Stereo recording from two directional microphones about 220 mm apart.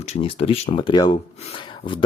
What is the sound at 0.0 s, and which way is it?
Speech, 30° left (ahead or behind).